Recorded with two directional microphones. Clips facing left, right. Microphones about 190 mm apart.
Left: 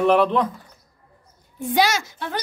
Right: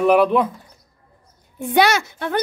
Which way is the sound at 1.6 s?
60° right (ahead or behind).